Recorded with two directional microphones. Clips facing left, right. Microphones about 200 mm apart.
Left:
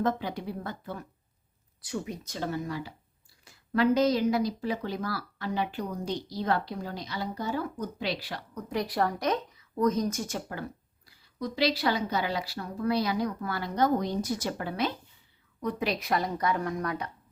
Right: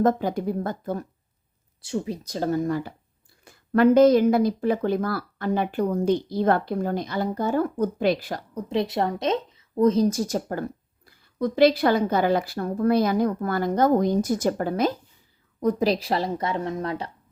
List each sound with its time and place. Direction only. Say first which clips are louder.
0.0 s a woman's voice: right 8 dB; 45° right (ahead or behind)
1.8 s a woman's voice: right 6 dB; 30° right (ahead or behind); by 8.4 s 45° right (ahead or behind)
8.5 s a woman's voice: right 5 dB; 25° right (ahead or behind)